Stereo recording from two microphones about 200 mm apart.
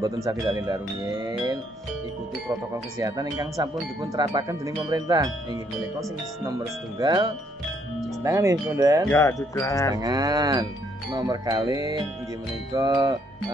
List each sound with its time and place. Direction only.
0.0 s speech: 20° right (ahead or behind)
3.0 s speech: 15° right (ahead or behind)
7.0 s speech: 20° right (ahead or behind)
9.1 s music: 15° left (ahead or behind)
9.9 s speech: 20° right (ahead or behind)